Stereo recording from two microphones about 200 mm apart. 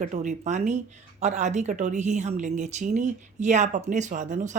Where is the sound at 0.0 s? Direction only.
35° right (ahead or behind).